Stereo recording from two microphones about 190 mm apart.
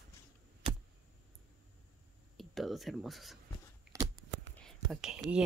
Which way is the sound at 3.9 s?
15° right (ahead or behind).